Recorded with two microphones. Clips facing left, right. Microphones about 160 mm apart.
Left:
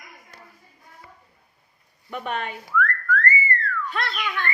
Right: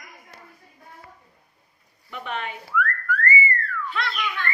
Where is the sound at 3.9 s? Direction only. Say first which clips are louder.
Right 1 dB; 45° left (ahead or behind).